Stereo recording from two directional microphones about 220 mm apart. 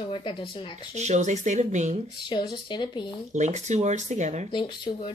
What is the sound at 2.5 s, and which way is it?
Speech, 20° left (ahead or behind).